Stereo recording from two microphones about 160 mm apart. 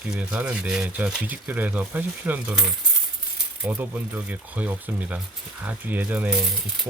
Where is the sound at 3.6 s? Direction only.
10° right (ahead or behind).